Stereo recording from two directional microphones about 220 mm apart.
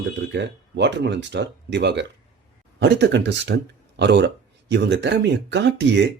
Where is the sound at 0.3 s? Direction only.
50° right (ahead or behind).